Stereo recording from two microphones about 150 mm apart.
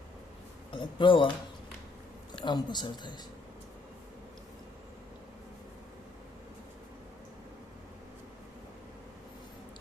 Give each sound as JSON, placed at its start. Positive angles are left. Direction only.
{"t": 0.7, "sound": "speech", "side_deg": 30}
{"t": 2.3, "sound": "speech", "side_deg": 30}